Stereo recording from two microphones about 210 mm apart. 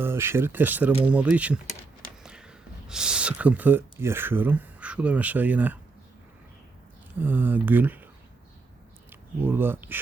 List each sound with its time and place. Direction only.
0.0 s speech: 10° right (ahead or behind)
2.2 s a sound: 5° right (ahead or behind)
7.2 s speech: 10° right (ahead or behind)
9.4 s speech: 10° right (ahead or behind)